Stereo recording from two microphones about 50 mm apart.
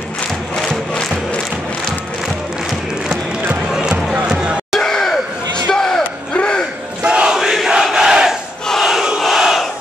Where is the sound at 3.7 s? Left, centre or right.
Centre.